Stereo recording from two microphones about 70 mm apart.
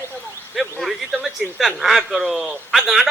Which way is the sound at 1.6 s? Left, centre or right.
Centre.